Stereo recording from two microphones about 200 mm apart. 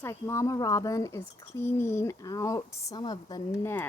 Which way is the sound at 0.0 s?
15° left (ahead or behind).